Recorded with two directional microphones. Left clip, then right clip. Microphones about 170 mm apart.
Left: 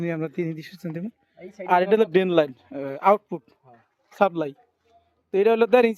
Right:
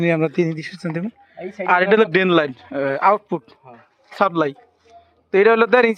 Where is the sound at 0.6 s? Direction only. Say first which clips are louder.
Right 8 dB; 35° left (ahead or behind).